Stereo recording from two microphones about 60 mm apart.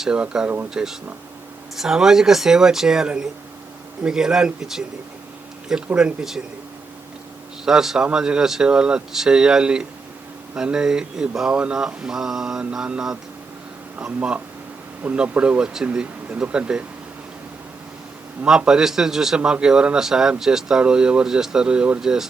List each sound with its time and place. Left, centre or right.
0.0 s speech: centre
0.4 s speech: right
0.7 s speech: centre
6.0 s speech: centre
7.6 s speech: centre
18.4 s speech: centre
22.0 s speech: centre